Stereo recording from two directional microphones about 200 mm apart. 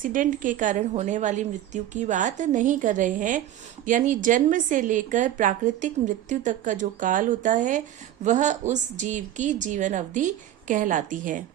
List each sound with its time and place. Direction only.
0.0 s a woman's voice: 40° right (ahead or behind)